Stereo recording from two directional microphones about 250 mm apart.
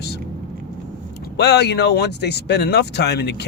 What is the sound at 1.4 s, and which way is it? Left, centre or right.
Speech, left.